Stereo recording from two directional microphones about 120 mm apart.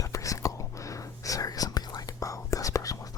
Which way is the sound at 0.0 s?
25° left (ahead or behind).